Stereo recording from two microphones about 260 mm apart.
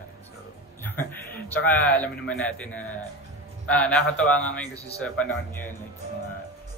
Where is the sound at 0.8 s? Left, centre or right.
Centre.